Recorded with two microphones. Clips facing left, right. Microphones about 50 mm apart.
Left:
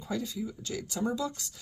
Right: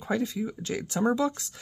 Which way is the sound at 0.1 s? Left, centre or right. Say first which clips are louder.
Right 6 dB; right.